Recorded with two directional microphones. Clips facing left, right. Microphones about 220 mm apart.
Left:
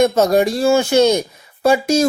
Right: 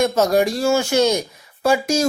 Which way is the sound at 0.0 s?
30° left (ahead or behind).